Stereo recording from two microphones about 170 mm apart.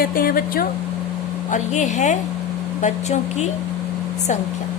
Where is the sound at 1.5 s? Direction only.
45° left (ahead or behind).